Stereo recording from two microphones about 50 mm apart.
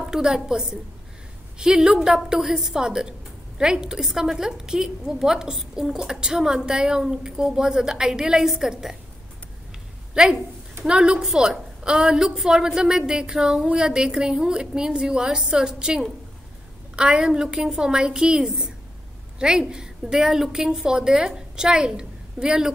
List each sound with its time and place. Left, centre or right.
0.1 s a woman's voice: centre
10.2 s a woman's voice: centre